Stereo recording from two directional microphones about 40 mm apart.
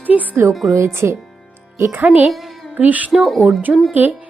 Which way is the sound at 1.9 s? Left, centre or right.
Right.